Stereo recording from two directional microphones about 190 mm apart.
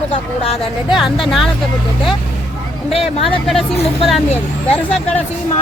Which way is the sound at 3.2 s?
Centre (ahead or behind).